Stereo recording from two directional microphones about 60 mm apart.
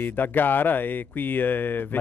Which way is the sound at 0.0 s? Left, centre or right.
Left.